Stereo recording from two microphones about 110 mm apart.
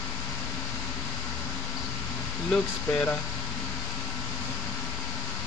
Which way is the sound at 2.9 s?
10° left (ahead or behind).